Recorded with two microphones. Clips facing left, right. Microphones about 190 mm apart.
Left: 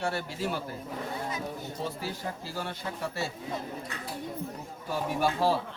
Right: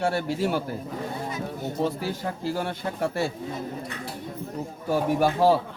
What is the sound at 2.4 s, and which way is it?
Speech, 60° right (ahead or behind).